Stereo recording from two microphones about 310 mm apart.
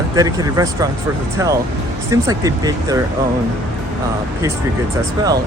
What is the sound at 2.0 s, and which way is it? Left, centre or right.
Speech, centre.